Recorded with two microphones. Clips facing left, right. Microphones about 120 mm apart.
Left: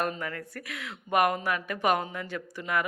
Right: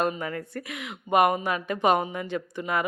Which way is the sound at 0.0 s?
20° right (ahead or behind).